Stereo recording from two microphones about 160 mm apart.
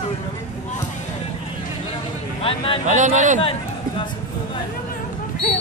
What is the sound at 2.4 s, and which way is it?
Speech, 35° left (ahead or behind).